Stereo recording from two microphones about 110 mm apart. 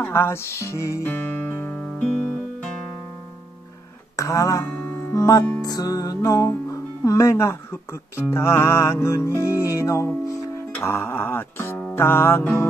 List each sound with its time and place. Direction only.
0.0 s music: 25° left (ahead or behind)
1.0 s music: 15° left (ahead or behind)
4.2 s speech: 30° left (ahead or behind)
5.1 s music: 30° left (ahead or behind)